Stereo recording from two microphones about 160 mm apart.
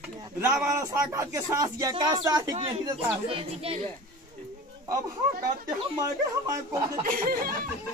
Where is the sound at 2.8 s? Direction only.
35° right (ahead or behind).